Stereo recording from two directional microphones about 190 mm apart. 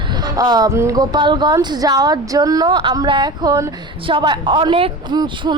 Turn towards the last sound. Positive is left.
turn(degrees=-25)  # may be behind; listen again after turning